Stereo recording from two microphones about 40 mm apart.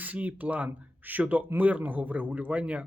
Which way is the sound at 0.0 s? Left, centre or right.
Right.